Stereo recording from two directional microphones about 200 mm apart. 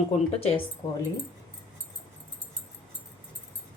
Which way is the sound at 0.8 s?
20° left (ahead or behind).